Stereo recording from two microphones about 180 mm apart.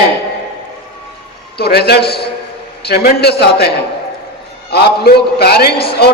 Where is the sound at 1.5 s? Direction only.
60° left (ahead or behind).